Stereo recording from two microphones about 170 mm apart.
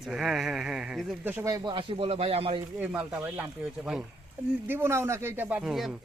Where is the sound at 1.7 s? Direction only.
35° right (ahead or behind).